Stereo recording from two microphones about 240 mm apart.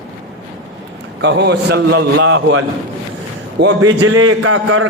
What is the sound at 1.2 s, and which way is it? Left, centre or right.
A man's voice, right.